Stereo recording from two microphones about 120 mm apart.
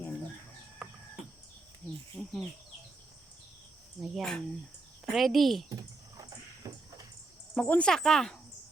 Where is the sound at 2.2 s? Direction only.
5° left (ahead or behind).